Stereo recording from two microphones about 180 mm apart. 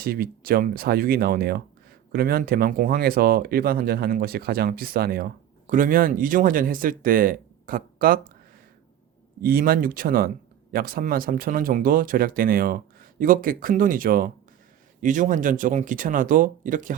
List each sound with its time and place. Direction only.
0.0 s speech: 55° right (ahead or behind)
9.4 s speech: 55° right (ahead or behind)